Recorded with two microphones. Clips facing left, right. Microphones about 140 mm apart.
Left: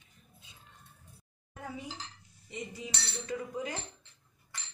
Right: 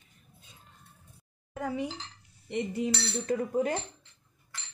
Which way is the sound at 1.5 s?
80° right.